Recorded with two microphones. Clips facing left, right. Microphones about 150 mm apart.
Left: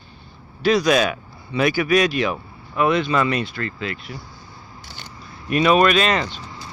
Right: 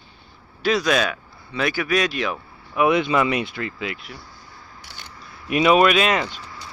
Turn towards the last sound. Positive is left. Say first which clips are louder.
# left 2 dB
turn(degrees=25)  # may be behind; listen again after turning